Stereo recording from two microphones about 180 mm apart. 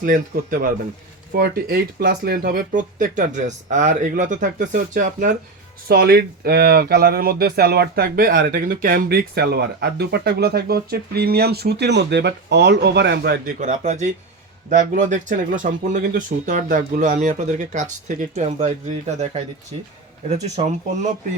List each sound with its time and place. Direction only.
0.0 s speech: 50° right (ahead or behind)
1.4 s speech: 60° right (ahead or behind)
5.9 s speech: 60° right (ahead or behind)
13.6 s speech: 45° right (ahead or behind)